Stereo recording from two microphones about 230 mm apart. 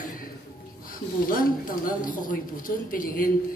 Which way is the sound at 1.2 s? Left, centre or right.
Left.